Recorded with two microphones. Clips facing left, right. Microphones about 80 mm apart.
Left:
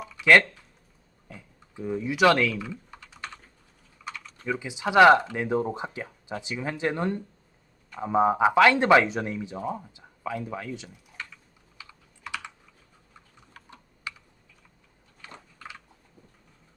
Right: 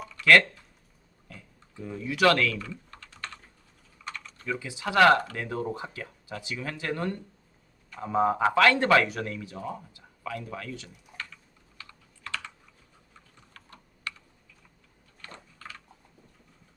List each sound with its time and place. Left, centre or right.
0.2 s speech: centre
1.3 s typing: centre
4.4 s speech: centre
11.8 s computer keyboard: centre
13.5 s computer keyboard: centre
15.2 s typing: centre